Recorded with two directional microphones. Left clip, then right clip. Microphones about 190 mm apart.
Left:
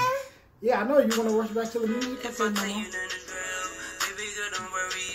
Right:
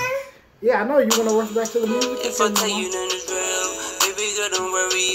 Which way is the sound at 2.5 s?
25° right (ahead or behind).